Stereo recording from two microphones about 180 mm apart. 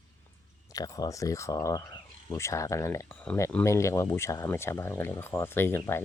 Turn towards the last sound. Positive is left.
turn(degrees=10)  # may be behind; listen again after turning